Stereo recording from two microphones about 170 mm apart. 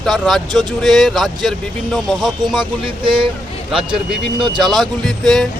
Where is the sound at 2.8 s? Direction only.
30° right (ahead or behind).